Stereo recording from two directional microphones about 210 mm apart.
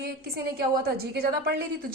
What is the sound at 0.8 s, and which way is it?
Speech, 45° right (ahead or behind).